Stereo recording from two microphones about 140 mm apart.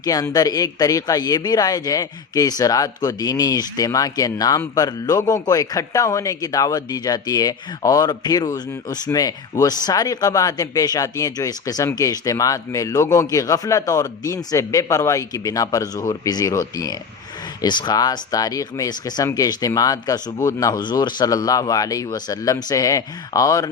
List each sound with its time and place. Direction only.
0.0 s speech: 25° left (ahead or behind)